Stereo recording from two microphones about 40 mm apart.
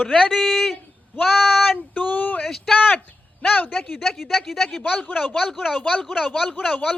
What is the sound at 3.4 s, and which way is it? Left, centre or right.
Speech, left.